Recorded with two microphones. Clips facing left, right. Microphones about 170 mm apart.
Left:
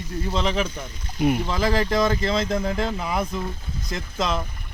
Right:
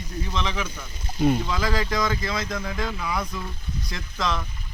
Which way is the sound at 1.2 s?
15° left (ahead or behind).